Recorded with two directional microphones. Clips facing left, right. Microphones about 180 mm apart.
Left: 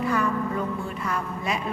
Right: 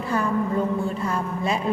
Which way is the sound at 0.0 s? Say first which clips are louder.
Right 1 dB; 30° right (ahead or behind).